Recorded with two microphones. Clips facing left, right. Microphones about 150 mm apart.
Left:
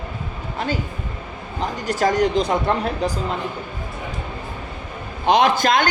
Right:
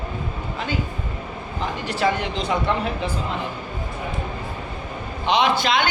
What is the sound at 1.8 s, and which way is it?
Speech, 45° left (ahead or behind).